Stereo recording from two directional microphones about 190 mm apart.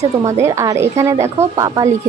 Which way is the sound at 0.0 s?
15° right (ahead or behind).